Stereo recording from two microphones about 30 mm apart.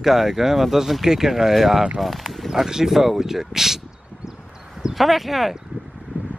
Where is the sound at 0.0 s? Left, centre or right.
Centre.